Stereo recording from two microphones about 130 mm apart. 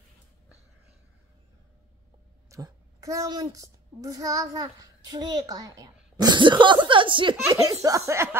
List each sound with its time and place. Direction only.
2.5 s a child's voice: 25° right (ahead or behind); by 7.3 s 40° right (ahead or behind)
7.4 s speech: 20° right (ahead or behind)